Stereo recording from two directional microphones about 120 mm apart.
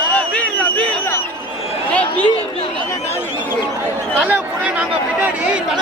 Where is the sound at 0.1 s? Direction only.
10° left (ahead or behind).